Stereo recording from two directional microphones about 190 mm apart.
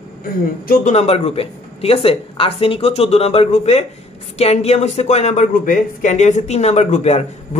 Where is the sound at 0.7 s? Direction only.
40° left (ahead or behind).